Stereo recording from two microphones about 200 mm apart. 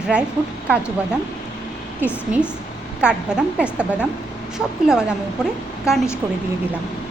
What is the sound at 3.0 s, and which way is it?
A woman's voice, 5° right (ahead or behind).